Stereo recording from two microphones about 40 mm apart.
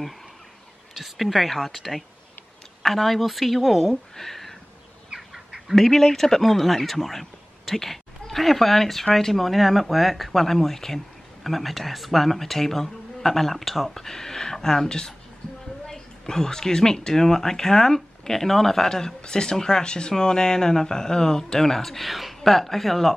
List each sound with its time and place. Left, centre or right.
0.9 s speech: centre
5.1 s duck: centre
5.9 s speech: centre